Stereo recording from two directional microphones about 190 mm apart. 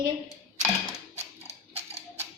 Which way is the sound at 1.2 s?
35° right (ahead or behind).